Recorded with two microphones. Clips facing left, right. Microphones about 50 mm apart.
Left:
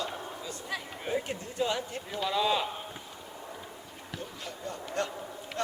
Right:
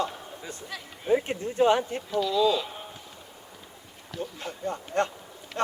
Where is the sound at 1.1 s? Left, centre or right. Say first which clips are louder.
Right 8 dB; right.